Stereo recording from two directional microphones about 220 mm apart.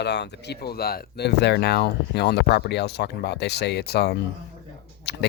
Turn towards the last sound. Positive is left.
turn(degrees=50)  # may be behind; listen again after turning